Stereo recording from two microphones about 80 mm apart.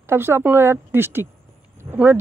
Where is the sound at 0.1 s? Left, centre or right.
Right.